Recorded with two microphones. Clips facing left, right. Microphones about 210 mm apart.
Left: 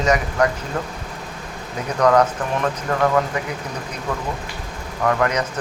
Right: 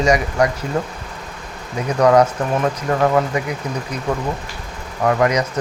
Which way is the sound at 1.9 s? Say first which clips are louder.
Right 3 dB; 10° right (ahead or behind).